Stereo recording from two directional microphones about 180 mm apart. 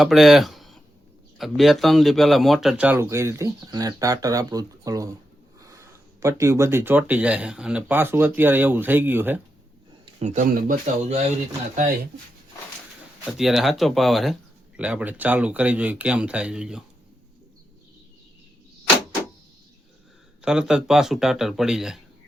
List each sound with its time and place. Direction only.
0.0 s a man's voice: centre (ahead or behind)
10.2 s speech: 40° right (ahead or behind)
13.2 s a man's voice: centre (ahead or behind)
20.4 s speech: 5° right (ahead or behind)